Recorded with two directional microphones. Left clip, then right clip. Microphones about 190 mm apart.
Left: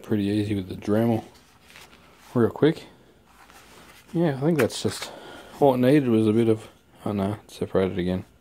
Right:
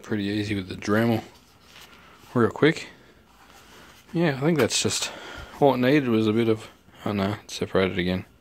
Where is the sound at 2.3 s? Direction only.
15° left (ahead or behind).